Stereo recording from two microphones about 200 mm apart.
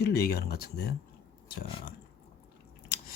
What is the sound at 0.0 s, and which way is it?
Speech, 50° left (ahead or behind).